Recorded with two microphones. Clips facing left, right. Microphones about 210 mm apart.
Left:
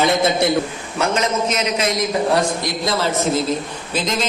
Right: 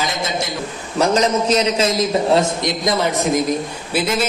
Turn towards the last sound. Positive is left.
turn(degrees=-10)  # may be behind; listen again after turning